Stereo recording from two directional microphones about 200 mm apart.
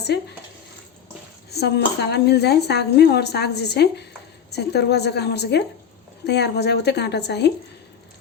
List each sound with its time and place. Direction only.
1.5 s speech: 55° left (ahead or behind)